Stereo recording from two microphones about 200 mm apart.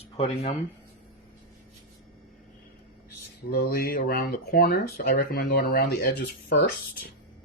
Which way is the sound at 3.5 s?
50° left (ahead or behind).